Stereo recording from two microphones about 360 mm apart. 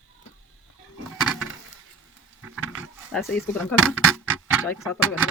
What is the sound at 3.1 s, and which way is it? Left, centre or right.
Speech, centre.